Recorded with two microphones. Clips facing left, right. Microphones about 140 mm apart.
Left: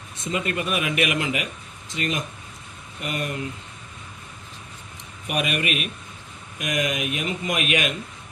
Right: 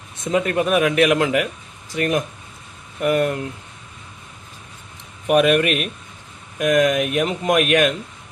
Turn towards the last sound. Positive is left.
turn(degrees=-45)  # may be behind; listen again after turning